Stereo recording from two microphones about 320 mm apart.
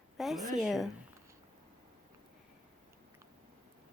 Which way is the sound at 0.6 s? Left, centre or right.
Centre.